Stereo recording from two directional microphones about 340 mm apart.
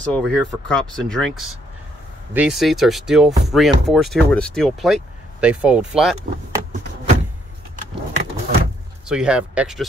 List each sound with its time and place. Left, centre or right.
0.0 s speech: centre
8.1 s vehicle: centre
9.0 s speech: centre